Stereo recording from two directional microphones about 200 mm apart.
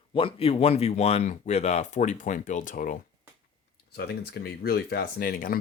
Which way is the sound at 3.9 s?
55° left (ahead or behind).